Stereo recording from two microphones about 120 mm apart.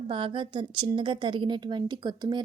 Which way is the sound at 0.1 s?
45° right (ahead or behind).